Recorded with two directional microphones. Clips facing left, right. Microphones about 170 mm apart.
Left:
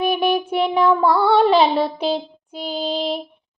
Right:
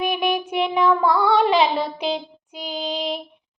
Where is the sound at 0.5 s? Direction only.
Centre (ahead or behind).